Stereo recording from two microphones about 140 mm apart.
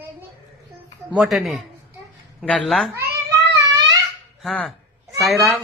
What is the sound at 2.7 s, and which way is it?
Speech, centre (ahead or behind).